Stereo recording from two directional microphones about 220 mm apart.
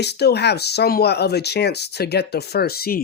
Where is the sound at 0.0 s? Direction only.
50° left (ahead or behind).